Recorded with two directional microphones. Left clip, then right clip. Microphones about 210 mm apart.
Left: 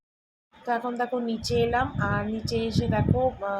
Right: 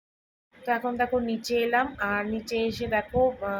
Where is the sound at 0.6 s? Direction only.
10° right (ahead or behind).